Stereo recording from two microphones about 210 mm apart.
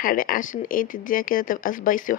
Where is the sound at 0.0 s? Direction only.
45° left (ahead or behind).